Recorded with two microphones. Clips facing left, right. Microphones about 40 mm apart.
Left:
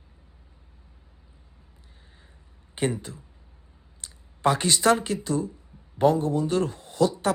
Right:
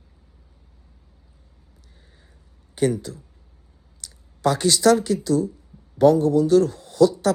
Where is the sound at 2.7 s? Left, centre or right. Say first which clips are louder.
Right 6 dB; left.